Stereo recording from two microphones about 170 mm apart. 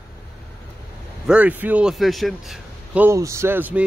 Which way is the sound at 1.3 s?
10° right (ahead or behind).